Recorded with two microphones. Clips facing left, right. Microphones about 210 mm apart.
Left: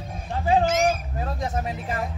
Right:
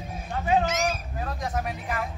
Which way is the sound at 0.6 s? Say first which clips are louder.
Left 5 dB; 50° left (ahead or behind).